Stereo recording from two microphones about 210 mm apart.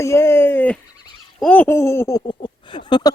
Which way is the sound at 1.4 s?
10° left (ahead or behind).